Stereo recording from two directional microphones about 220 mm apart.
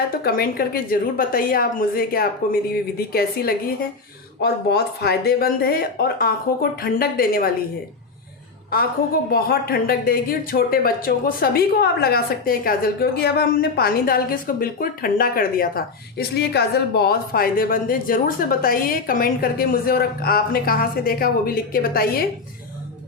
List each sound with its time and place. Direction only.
0.3 s a woman's voice: 40° left (ahead or behind)
9.3 s speech: 45° left (ahead or behind)